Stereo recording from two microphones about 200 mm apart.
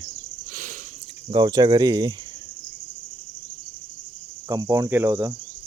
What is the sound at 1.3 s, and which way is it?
Speech, 20° right (ahead or behind).